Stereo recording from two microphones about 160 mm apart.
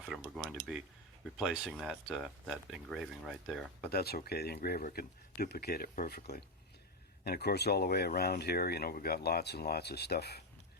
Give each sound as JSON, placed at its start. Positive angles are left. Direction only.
{"t": 0.1, "sound": "speech", "side_deg": 0}
{"t": 3.9, "sound": "speech", "side_deg": 75}
{"t": 7.3, "sound": "speech", "side_deg": 90}